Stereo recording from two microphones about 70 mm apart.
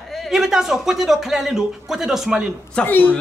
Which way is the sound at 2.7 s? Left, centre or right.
Left.